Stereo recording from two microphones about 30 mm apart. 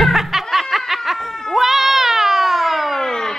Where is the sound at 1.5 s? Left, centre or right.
Centre.